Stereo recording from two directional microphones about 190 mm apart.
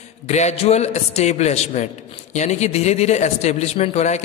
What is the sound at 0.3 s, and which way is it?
A man's voice, 35° left (ahead or behind).